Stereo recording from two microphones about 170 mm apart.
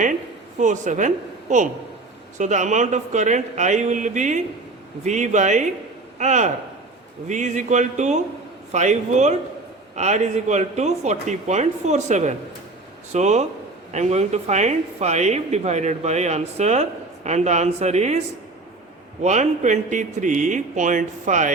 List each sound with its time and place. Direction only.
0.6 s speech: 45° right (ahead or behind)
19.2 s speech: 45° right (ahead or behind)